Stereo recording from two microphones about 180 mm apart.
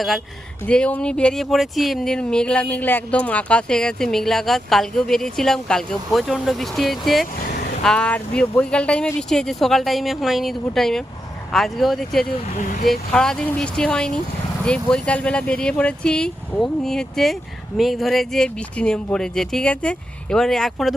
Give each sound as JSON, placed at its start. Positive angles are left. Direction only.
{"t": 0.7, "sound": "speech", "side_deg": 5}
{"t": 12.5, "sound": "speech", "side_deg": 45}
{"t": 13.1, "sound": "speech", "side_deg": 5}